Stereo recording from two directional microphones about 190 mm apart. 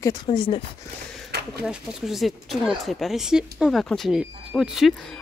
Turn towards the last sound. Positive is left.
turn(degrees=0)  # may be behind; listen again after turning